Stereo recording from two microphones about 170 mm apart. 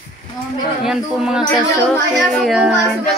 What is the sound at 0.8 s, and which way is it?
A woman's voice, 5° right (ahead or behind).